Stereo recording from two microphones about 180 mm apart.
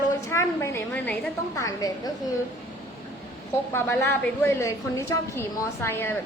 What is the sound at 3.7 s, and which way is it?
A woman's voice, 15° left (ahead or behind).